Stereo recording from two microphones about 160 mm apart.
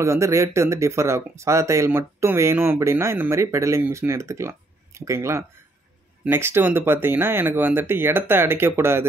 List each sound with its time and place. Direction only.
0.0 s speech: 20° right (ahead or behind)